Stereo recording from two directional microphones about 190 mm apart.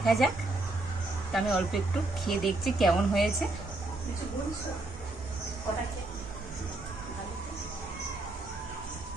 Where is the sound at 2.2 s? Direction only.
Centre (ahead or behind).